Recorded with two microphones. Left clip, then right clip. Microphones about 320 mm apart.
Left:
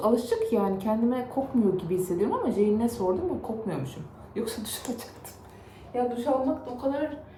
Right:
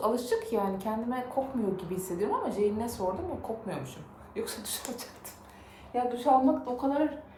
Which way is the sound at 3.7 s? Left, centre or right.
Centre.